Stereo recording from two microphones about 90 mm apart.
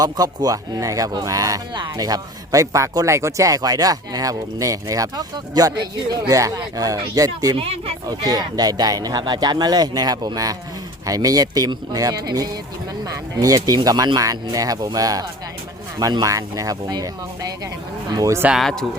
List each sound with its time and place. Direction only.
0.0 s speech: 45° right (ahead or behind)
1.7 s speech: 50° right (ahead or behind)
7.5 s speech: 90° right
8.0 s speech: 45° right (ahead or behind)
18.5 s speech: 5° left (ahead or behind)